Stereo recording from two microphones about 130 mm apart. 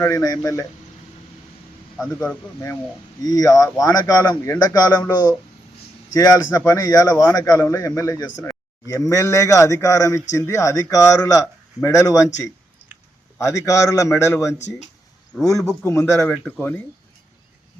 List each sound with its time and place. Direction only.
0.0 s a man's voice: 25° left (ahead or behind)
2.1 s speech: 15° left (ahead or behind)
3.2 s a man's voice: 25° left (ahead or behind)
12.8 s clicking: 15° right (ahead or behind)
13.4 s a man's voice: 25° left (ahead or behind)